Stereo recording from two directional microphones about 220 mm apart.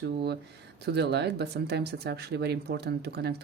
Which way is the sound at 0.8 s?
50° right (ahead or behind).